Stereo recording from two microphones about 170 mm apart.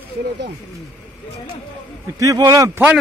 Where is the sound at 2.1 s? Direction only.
20° right (ahead or behind).